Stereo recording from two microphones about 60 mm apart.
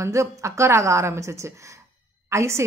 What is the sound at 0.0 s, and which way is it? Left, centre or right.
A woman's voice, right.